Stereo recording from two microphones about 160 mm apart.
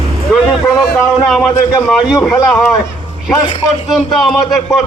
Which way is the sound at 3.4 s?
30° left (ahead or behind).